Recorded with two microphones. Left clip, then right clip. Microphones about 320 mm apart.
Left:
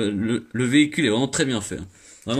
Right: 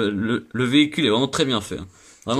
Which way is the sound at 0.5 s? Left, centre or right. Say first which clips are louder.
Even; centre.